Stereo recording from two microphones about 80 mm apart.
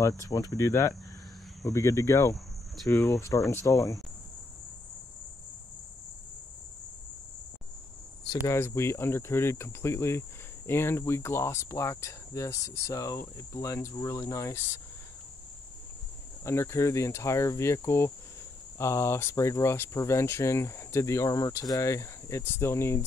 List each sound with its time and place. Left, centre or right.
0.0 s speech: left
8.5 s speech: left
16.4 s speech: left